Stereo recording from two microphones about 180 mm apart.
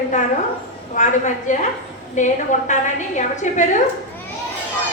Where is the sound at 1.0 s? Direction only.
45° left (ahead or behind).